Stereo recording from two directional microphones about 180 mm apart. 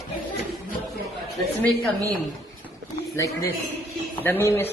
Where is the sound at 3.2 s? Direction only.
15° left (ahead or behind).